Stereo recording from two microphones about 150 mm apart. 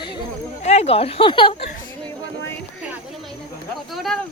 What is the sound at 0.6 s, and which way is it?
Speech, 45° left (ahead or behind).